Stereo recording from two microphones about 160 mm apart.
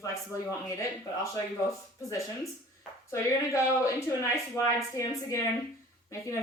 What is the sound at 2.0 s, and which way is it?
Speech, 20° left (ahead or behind).